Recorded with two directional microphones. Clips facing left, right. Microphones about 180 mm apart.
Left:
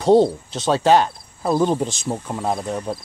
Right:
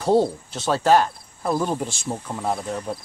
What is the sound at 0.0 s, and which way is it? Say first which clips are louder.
Speech: left 5 dB; 20° left (ahead or behind).